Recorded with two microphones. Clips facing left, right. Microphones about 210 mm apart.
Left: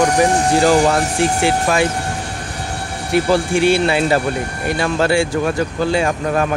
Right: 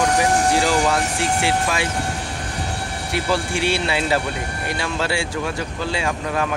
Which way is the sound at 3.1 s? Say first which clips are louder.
Left 8 dB; 50° left (ahead or behind).